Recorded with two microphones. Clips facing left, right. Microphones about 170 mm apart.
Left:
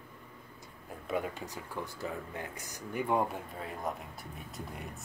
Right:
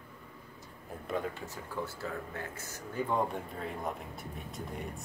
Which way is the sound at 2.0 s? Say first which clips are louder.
Even; 15° left (ahead or behind).